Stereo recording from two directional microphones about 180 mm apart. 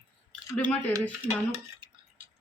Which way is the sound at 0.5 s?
5° left (ahead or behind).